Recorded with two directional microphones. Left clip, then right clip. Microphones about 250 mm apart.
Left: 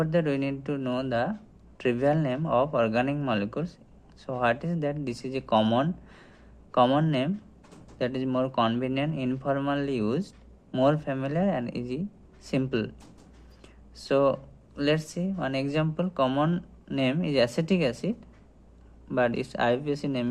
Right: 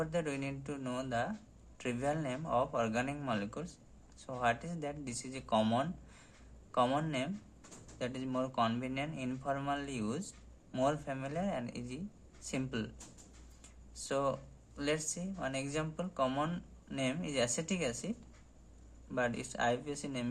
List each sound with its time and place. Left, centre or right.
0.0 s speech: left
13.6 s a sound: left
14.8 s speech: left